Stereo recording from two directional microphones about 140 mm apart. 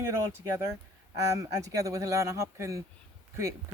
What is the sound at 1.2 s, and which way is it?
Speech, 25° right (ahead or behind).